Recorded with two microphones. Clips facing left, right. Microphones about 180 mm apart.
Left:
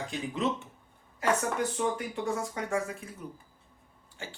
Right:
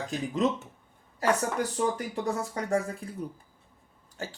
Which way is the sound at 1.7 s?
35° right (ahead or behind).